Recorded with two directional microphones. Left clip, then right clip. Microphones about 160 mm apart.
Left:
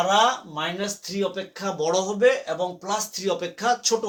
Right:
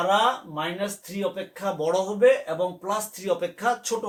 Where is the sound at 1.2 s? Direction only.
20° left (ahead or behind).